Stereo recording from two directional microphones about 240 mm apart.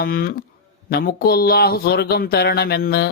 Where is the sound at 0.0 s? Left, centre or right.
Left.